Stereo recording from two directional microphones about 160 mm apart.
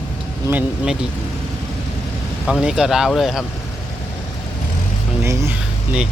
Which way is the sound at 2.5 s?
5° right (ahead or behind).